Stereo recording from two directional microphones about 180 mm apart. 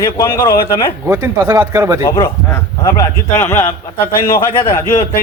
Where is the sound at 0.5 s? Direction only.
55° left (ahead or behind).